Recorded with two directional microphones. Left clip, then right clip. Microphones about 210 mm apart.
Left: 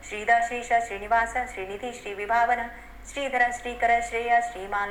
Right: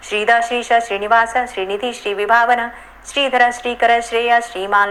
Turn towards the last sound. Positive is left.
turn(degrees=-30)  # may be behind; listen again after turning